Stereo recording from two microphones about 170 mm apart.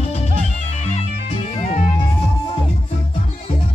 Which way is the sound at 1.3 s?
40° left (ahead or behind).